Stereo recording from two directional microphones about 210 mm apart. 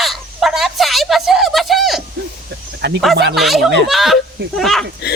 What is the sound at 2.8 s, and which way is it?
Speech, 55° right (ahead or behind).